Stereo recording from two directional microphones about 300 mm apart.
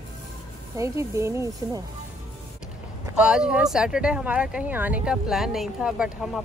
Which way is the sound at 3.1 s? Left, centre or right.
Centre.